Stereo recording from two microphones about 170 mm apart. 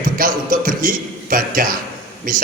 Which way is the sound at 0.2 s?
55° right (ahead or behind).